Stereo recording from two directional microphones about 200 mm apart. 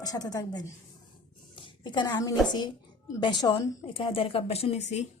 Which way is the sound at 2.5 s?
20° left (ahead or behind).